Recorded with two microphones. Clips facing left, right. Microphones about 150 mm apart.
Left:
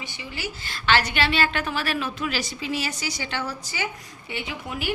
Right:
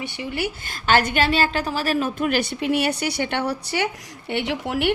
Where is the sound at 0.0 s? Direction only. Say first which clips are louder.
Right 8 dB; 60° right (ahead or behind).